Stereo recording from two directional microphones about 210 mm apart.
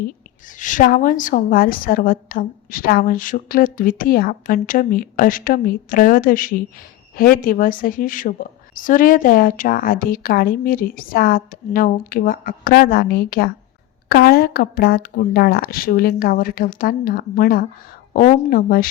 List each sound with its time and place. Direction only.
0.4 s a woman's voice: 40° left (ahead or behind)